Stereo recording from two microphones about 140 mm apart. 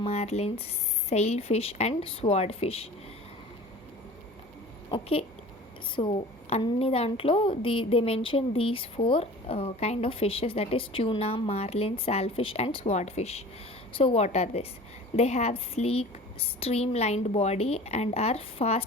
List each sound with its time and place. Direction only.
0.0 s a woman's voice: 50° left (ahead or behind)
4.9 s a woman's voice: 45° left (ahead or behind)